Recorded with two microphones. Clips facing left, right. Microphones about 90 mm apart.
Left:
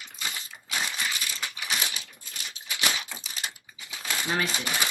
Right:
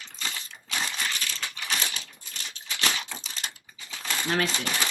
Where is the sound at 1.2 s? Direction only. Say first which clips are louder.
Even; 15° left (ahead or behind).